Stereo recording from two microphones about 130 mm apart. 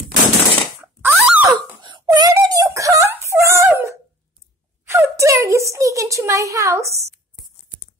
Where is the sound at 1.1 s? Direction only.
10° right (ahead or behind).